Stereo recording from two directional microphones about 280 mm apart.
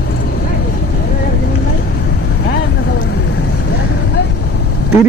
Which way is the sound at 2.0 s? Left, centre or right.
Left.